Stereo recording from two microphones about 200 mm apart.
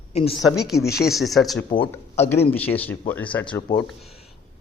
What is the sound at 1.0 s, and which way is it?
Speech, centre (ahead or behind).